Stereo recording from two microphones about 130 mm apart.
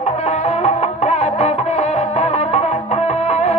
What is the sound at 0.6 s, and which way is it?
Music, 55° left (ahead or behind).